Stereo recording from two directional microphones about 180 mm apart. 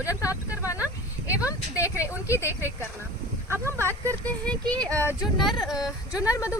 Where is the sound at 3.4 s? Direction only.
15° right (ahead or behind).